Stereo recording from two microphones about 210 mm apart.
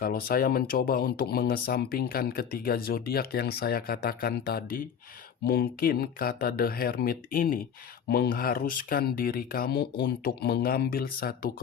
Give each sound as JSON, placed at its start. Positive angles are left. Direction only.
{"t": 0.0, "sound": "speech", "side_deg": 45}